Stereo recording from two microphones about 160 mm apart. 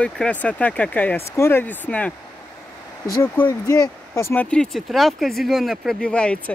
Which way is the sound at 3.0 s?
20° left (ahead or behind).